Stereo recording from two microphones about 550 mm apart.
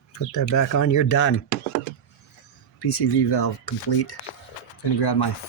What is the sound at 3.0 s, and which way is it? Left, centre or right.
Speech, left.